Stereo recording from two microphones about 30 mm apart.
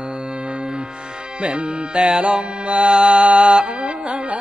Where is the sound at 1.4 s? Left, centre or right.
Right.